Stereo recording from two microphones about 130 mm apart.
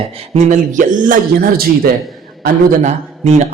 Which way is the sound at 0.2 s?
65° right (ahead or behind).